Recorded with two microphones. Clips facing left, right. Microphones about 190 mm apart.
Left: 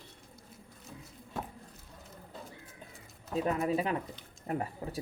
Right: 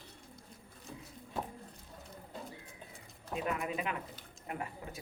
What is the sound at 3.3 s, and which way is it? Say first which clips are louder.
Speech: left 6 dB; 35° left (ahead or behind).